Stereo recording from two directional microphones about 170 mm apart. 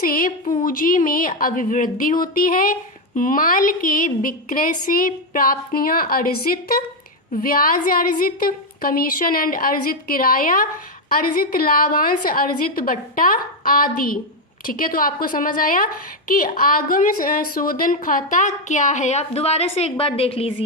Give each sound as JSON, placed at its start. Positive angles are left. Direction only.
{"t": 0.0, "sound": "a woman's voice", "side_deg": 55}